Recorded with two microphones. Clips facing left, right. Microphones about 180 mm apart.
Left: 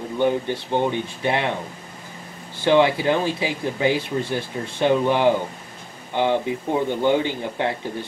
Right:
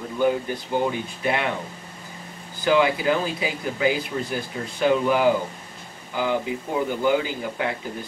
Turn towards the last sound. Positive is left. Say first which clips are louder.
# left 3 dB
turn(degrees=25)  # may be behind; listen again after turning